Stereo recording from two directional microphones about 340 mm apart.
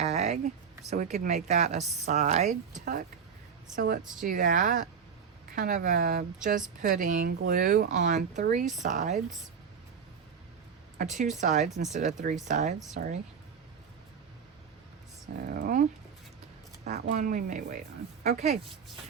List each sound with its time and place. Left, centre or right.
0.0 s a sound: centre
0.9 s speech: right
4.1 s speech: right
10.9 s speech: right
15.5 s speech: right
16.8 s speech: right